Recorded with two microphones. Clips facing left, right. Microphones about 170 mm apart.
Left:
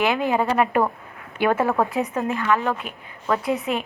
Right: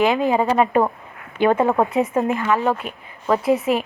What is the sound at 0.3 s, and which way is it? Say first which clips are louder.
A woman's voice: right 3 dB; 25° right (ahead or behind).